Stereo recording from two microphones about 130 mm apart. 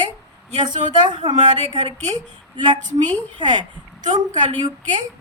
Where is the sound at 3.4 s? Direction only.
35° right (ahead or behind).